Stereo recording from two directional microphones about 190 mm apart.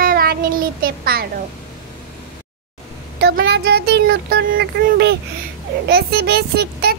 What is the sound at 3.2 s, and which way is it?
A child's voice, 55° right (ahead or behind).